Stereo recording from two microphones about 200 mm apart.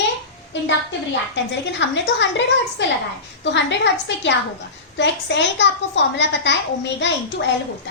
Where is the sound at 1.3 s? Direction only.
65° left (ahead or behind).